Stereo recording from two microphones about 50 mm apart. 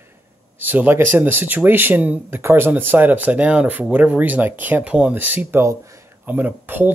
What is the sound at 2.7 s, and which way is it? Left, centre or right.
Speech, right.